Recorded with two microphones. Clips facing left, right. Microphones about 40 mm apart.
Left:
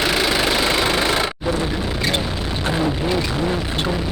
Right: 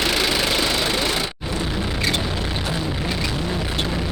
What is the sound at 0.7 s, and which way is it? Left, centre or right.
Vehicle, left.